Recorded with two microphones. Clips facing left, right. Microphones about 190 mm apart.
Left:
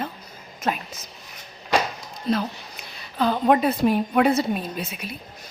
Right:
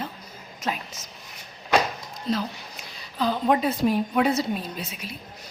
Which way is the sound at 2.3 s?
60° left (ahead or behind).